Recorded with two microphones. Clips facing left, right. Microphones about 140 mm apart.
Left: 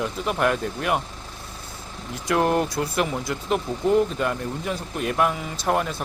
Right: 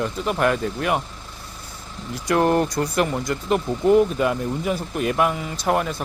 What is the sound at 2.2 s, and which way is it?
Speech, centre (ahead or behind).